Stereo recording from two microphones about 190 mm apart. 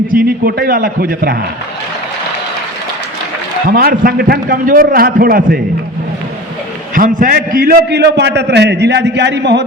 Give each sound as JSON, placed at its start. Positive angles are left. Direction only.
{"t": 0.1, "sound": "a man's voice", "side_deg": -50}
{"t": 3.7, "sound": "a man's voice", "side_deg": -50}
{"t": 6.9, "sound": "a man's voice", "side_deg": -45}